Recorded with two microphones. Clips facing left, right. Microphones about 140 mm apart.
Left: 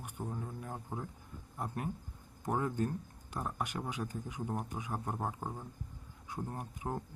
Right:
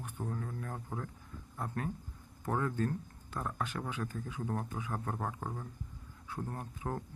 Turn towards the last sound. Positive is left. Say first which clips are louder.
# even
turn(degrees=15)  # may be behind; listen again after turning